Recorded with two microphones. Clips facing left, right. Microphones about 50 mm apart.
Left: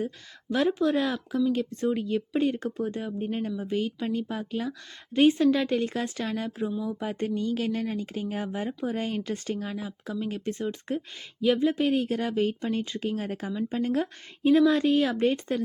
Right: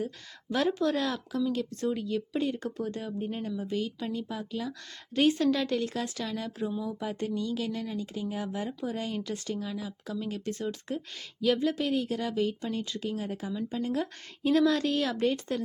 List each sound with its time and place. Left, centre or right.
0.5 s a woman's voice: centre; by 14.1 s left
14.4 s a woman's voice: centre